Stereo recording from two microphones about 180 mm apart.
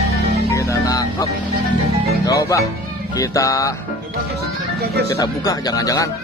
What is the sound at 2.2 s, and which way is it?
Speech, 20° left (ahead or behind).